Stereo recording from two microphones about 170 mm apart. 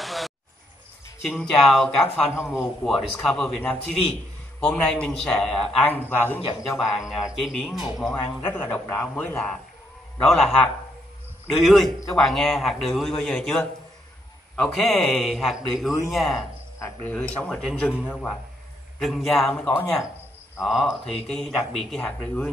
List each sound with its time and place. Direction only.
0.0 s a sound: centre (ahead or behind)
1.2 s a man's voice: centre (ahead or behind)
6.8 s a man's voice: centre (ahead or behind)
8.2 s a man's voice: 10° left (ahead or behind)
20.6 s a man's voice: centre (ahead or behind)